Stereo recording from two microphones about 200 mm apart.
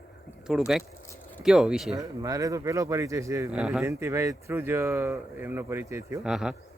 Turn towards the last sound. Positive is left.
turn(degrees=-5)  # may be behind; listen again after turning